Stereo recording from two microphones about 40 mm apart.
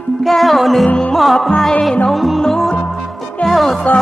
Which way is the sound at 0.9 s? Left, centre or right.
Left.